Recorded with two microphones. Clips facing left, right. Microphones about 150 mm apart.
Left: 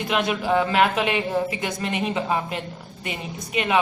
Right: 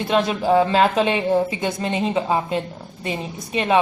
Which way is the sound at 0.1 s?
30° right (ahead or behind).